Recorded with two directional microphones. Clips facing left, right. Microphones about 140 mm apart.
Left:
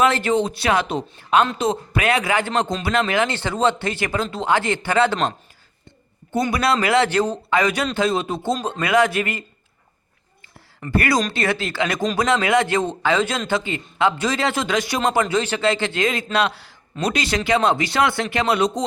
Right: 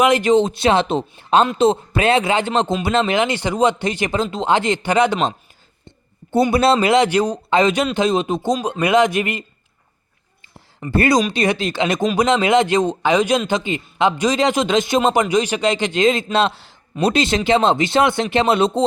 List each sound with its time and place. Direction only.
0.0 s a man's voice: 15° right (ahead or behind)
6.5 s a man's voice: 25° right (ahead or behind)
10.8 s a man's voice: 20° right (ahead or behind)